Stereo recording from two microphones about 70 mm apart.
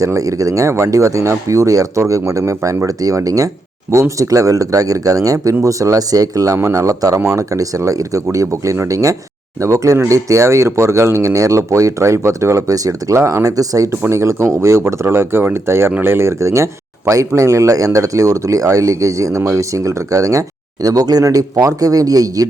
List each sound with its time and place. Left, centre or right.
0.0 s speech: right
13.9 s speech: right
20.8 s speech: right